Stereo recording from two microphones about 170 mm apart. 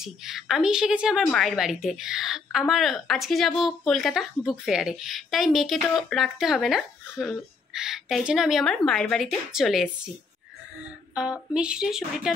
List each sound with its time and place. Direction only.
0.0 s a woman's voice: centre (ahead or behind)
11.1 s a woman's voice: 5° right (ahead or behind)